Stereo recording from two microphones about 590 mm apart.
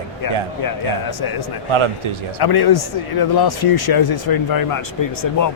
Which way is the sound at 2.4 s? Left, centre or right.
Left.